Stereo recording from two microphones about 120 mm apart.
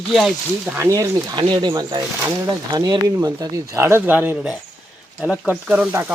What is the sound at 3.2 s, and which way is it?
Speech, 25° right (ahead or behind).